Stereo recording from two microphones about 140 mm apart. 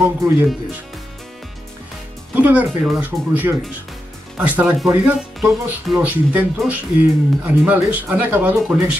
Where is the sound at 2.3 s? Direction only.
10° right (ahead or behind).